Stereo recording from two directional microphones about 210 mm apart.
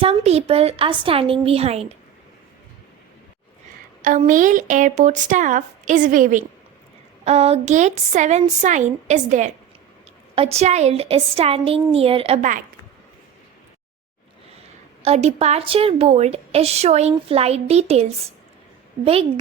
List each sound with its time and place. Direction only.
0.0 s a woman's voice: 30° right (ahead or behind)
4.0 s a woman's voice: 40° right (ahead or behind)
15.0 s a woman's voice: 30° right (ahead or behind)